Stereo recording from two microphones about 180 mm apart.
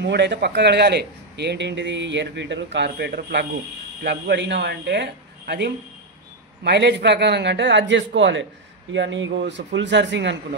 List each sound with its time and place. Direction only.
0.0 s speech: 75° right (ahead or behind)